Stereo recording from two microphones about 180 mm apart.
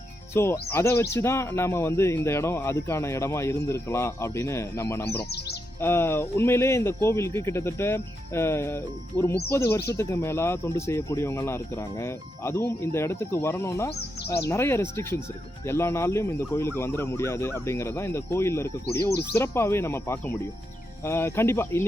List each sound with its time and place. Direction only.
0.3 s speech: 15° left (ahead or behind)
5.3 s speech: 65° left (ahead or behind)
5.8 s speech: 15° left (ahead or behind)